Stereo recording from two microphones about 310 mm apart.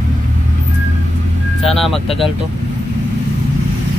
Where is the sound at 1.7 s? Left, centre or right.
Centre.